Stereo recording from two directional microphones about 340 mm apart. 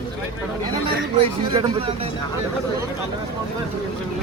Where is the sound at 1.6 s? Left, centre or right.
Centre.